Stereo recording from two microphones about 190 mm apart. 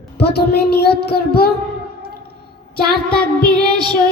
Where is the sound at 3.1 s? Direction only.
55° left (ahead or behind).